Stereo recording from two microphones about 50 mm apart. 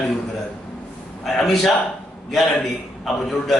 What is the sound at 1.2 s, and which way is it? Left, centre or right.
A man's voice, centre.